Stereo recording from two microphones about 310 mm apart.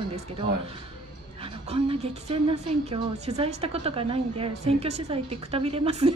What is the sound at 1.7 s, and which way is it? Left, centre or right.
A woman's voice, centre.